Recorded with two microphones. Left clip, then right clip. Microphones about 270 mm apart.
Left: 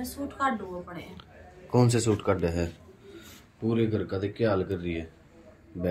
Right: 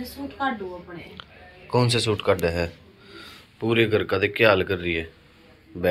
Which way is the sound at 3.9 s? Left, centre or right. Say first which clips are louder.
Right 9 dB; centre.